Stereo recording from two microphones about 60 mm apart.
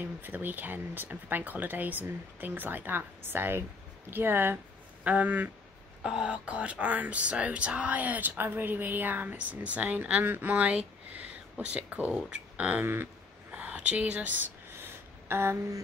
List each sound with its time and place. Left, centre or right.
0.0 s speech: right
5.0 s speech: right
6.0 s speech: centre
12.3 s a sound: right
12.8 s speech: right
13.5 s speech: right
14.8 s a sound: right